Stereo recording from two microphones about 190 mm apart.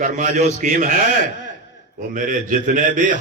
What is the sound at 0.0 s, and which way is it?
Speech, 40° right (ahead or behind).